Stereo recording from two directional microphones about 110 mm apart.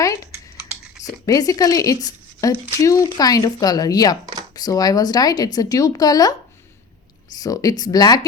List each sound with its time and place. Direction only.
1.2 s speech: 30° left (ahead or behind)
7.3 s speech: 35° left (ahead or behind)